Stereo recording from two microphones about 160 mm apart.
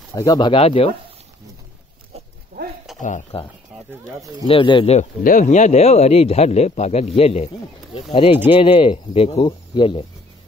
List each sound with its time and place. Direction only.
0.1 s speech: 25° left (ahead or behind)
2.6 s a sound: 80° right
3.0 s speech: 50° left (ahead or behind)
3.7 s a sound: centre (ahead or behind)
4.2 s speech: 25° right (ahead or behind)
4.5 s speech: 30° left (ahead or behind)
5.2 s speech: 55° left (ahead or behind); by 10.0 s 30° left (ahead or behind)